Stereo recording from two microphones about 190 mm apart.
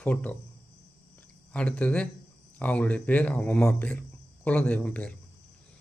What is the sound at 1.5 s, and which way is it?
Speech, 5° left (ahead or behind).